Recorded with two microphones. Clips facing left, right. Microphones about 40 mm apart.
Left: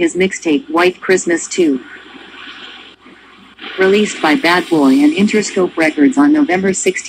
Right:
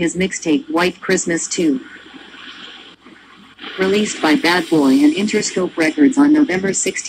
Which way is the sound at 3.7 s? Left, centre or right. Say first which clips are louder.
Left 5 dB; left.